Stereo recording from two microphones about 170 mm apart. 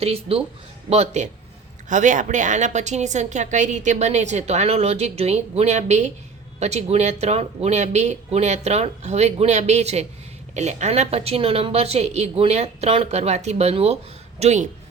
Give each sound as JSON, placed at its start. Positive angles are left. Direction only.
{"t": 0.0, "sound": "a woman's voice", "side_deg": -35}